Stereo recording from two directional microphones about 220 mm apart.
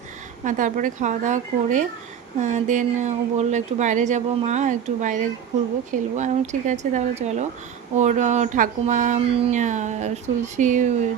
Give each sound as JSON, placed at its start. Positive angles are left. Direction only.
{"t": 0.4, "sound": "speech", "side_deg": -35}